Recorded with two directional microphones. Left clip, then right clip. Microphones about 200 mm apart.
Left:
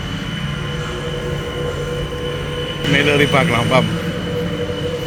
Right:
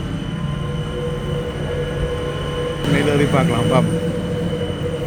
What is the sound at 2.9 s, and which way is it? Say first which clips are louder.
Speech: left 4 dB; centre (ahead or behind).